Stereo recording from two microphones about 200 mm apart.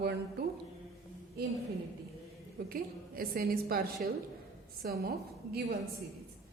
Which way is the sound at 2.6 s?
45° right (ahead or behind).